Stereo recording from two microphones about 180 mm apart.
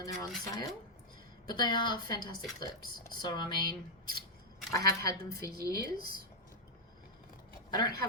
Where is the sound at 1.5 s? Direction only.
25° left (ahead or behind).